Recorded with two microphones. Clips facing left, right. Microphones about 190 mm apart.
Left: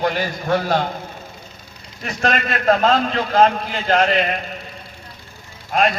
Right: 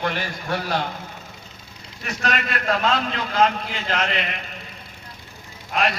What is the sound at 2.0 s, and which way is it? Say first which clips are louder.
A man's voice: left 5 dB; 35° left (ahead or behind).